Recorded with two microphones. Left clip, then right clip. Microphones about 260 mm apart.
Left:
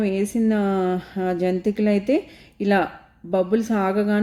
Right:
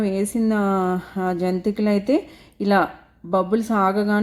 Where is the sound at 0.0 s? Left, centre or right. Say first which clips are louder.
Even; right.